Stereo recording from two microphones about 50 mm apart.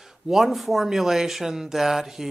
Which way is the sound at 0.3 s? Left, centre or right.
Centre.